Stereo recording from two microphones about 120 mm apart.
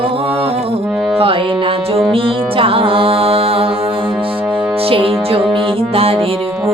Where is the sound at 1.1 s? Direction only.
50° right (ahead or behind).